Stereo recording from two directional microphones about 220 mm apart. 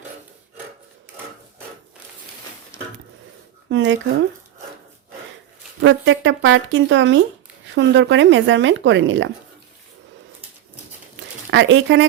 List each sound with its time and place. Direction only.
3.7 s speech: 55° right (ahead or behind)
5.8 s speech: 55° right (ahead or behind)
11.5 s speech: 55° right (ahead or behind)